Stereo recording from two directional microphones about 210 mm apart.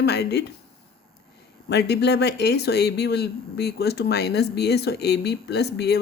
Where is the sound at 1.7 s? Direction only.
50° left (ahead or behind).